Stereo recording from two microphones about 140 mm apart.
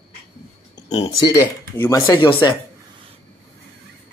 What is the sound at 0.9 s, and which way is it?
Speech, 30° left (ahead or behind).